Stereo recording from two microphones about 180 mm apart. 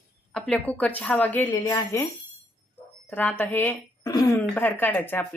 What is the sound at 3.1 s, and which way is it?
A woman's voice, 10° left (ahead or behind).